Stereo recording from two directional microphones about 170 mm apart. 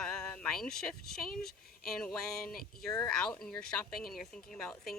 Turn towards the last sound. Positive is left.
turn(degrees=5)  # may be behind; listen again after turning